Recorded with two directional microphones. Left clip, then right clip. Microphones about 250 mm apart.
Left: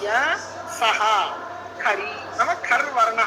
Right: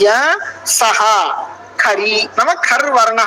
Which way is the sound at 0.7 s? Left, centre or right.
Right.